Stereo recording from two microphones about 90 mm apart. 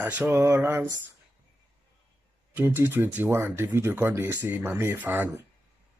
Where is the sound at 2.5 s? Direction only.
20° right (ahead or behind).